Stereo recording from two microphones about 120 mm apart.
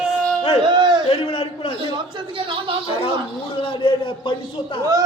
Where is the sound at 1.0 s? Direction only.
50° left (ahead or behind).